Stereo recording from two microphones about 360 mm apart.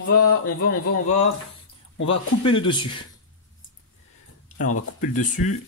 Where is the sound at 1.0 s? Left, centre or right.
Centre.